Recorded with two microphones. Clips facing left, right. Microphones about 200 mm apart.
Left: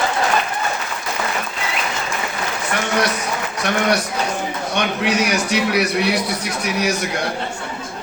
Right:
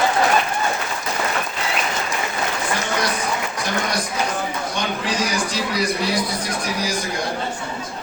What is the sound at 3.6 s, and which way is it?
A man's voice, 65° left (ahead or behind).